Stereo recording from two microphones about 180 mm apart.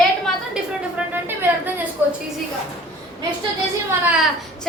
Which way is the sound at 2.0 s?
10° right (ahead or behind).